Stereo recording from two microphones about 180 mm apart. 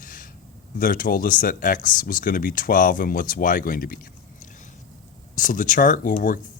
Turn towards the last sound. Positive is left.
turn(degrees=50)  # may be behind; listen again after turning